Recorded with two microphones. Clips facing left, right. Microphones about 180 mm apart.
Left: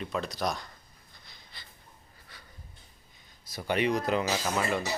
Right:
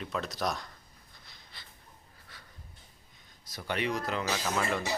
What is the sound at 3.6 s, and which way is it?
Speech, 15° left (ahead or behind).